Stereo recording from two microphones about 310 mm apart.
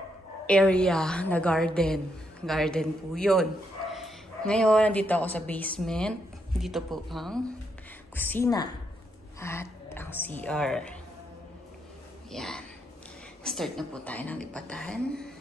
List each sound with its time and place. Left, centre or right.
0.5 s a woman's voice: centre
12.3 s a woman's voice: centre